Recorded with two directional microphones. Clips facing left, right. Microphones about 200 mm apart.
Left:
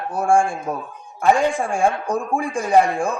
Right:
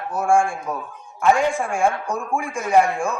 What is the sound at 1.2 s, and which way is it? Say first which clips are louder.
A man's voice: left 1 dB; 35° left (ahead or behind).